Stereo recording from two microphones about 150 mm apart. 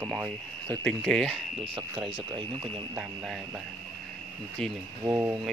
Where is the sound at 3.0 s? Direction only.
Centre (ahead or behind).